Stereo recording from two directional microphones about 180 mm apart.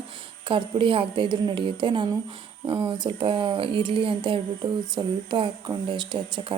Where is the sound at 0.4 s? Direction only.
30° right (ahead or behind).